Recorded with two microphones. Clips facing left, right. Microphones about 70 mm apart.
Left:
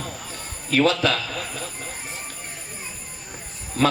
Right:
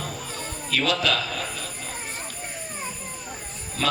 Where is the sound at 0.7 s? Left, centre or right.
Left.